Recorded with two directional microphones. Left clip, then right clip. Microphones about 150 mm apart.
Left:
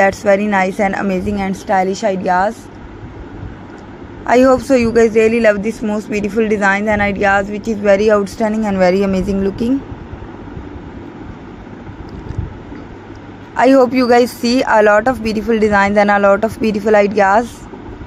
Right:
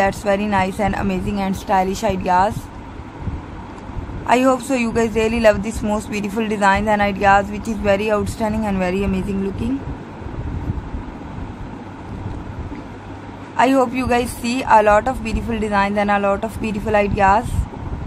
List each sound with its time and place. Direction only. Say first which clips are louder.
0.0 s speech: left 6 dB; 20° left (ahead or behind)
4.3 s speech: left 6 dB; 20° left (ahead or behind); by 7.8 s 5° left (ahead or behind)
7.8 s speech: left 6 dB; 20° left (ahead or behind)
8.8 s speech: left 8 dB; 40° left (ahead or behind)
13.6 s speech: left 6 dB; 30° left (ahead or behind)